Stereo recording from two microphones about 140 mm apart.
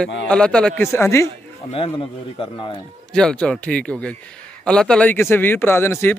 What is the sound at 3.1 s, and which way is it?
A man's voice, 5° left (ahead or behind).